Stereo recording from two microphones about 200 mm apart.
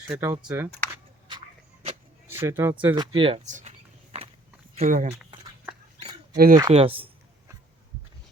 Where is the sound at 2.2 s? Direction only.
10° right (ahead or behind).